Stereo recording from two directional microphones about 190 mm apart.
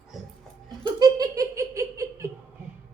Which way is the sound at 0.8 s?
20° right (ahead or behind).